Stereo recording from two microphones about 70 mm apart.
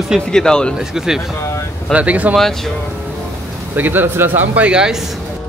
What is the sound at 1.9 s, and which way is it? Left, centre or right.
Speech, centre.